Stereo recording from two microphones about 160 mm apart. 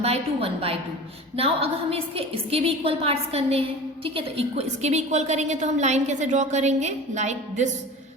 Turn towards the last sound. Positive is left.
turn(degrees=-45)  # may be behind; listen again after turning